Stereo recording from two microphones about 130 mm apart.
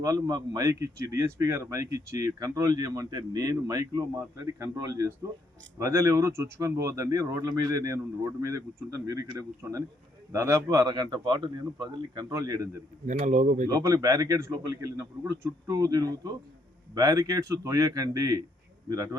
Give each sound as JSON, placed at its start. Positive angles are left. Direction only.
{"t": 0.0, "sound": "a man's voice", "side_deg": -30}
{"t": 13.1, "sound": "speech", "side_deg": -70}
{"t": 13.7, "sound": "a man's voice", "side_deg": -25}